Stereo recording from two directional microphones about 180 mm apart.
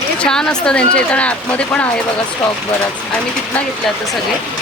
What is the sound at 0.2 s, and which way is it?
Speech, 5° left (ahead or behind).